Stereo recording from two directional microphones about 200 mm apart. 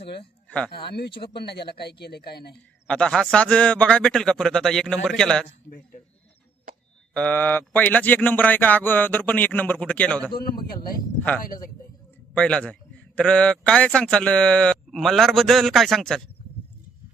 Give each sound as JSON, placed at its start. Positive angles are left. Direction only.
{"t": 0.0, "sound": "speech", "side_deg": 55}
{"t": 2.8, "sound": "speech", "side_deg": 5}
{"t": 7.1, "sound": "speech", "side_deg": 5}
{"t": 10.3, "sound": "speech", "side_deg": 50}
{"t": 12.3, "sound": "speech", "side_deg": 5}